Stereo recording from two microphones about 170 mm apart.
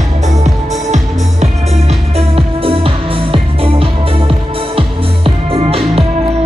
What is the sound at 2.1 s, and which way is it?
Music, 35° right (ahead or behind).